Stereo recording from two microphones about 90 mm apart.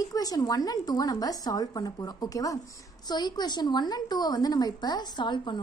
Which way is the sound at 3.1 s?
50° left (ahead or behind).